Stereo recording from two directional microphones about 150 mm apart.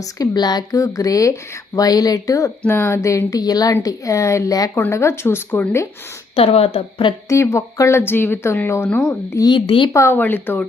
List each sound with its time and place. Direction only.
0.0 s speech: 25° left (ahead or behind)
6.3 s a woman's voice: 40° left (ahead or behind)
7.3 s speech: 20° left (ahead or behind)
9.3 s a woman's voice: 30° left (ahead or behind)
9.9 s speech: 15° left (ahead or behind)